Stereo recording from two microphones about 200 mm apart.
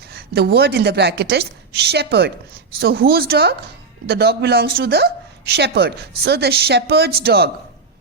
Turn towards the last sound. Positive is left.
turn(degrees=-50)  # may be behind; listen again after turning